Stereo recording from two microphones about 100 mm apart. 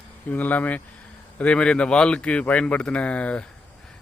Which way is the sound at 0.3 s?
15° left (ahead or behind).